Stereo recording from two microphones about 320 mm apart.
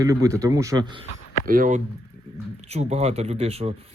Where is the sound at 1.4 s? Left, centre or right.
Right.